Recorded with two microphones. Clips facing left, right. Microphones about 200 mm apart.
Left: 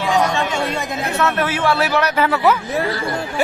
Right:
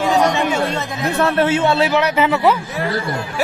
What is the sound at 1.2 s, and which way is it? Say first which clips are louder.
A man's voice: right 4 dB; 25° right (ahead or behind).